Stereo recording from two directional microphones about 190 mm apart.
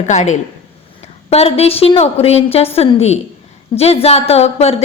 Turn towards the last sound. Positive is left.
turn(degrees=35)  # may be behind; listen again after turning